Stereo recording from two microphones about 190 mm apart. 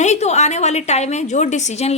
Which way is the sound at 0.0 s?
35° left (ahead or behind).